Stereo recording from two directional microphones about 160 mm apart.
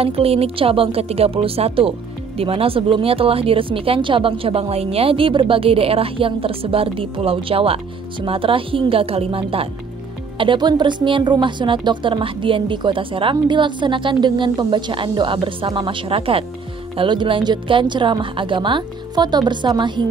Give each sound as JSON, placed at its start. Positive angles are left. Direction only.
{"t": 0.0, "sound": "speech", "side_deg": -40}